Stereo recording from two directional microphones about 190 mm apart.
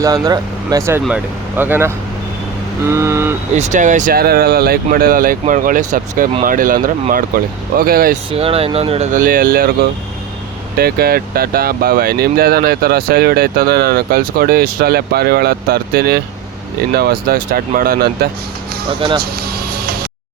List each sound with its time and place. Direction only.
0.0 s speech: 20° right (ahead or behind)
3.5 s speech: 40° right (ahead or behind)
8.3 s speech: 30° right (ahead or behind)
9.1 s speech: 45° right (ahead or behind)
10.8 s speech: 55° right (ahead or behind)
18.9 s speech: 30° right (ahead or behind)
19.2 s music: 55° right (ahead or behind)